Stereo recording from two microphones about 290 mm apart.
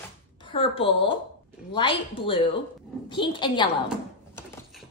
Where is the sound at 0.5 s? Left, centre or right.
Centre.